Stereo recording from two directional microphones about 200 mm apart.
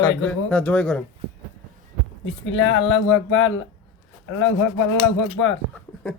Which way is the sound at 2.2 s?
75° left (ahead or behind).